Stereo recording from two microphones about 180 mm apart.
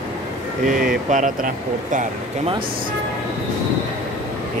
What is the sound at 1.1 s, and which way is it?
Speech, 45° right (ahead or behind).